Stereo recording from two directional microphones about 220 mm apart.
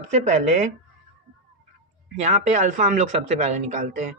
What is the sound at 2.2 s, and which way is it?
Speech, 30° right (ahead or behind).